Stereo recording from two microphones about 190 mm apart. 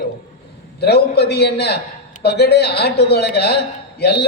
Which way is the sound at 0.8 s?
60° left (ahead or behind).